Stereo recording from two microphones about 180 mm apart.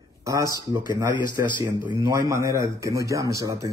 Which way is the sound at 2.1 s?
15° right (ahead or behind).